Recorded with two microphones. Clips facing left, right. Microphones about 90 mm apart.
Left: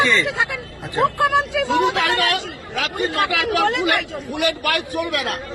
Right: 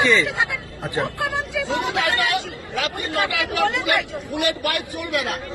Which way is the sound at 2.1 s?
90° left.